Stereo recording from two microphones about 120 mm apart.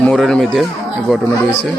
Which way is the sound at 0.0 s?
5° left (ahead or behind).